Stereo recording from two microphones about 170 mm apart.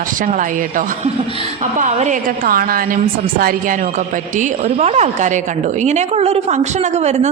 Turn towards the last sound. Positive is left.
turn(degrees=-40)  # may be behind; listen again after turning